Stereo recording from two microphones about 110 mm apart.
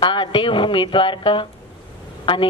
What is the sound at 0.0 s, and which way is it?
Speech, 45° left (ahead or behind).